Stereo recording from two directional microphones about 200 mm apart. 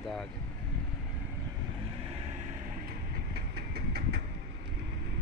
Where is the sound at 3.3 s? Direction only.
50° right (ahead or behind).